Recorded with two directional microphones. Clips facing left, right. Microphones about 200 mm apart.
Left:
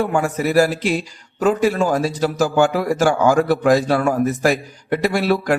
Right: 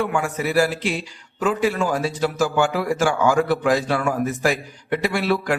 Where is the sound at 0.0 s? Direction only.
40° left (ahead or behind).